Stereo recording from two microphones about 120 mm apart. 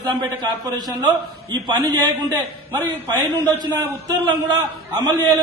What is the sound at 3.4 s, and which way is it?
A man's voice, 35° right (ahead or behind).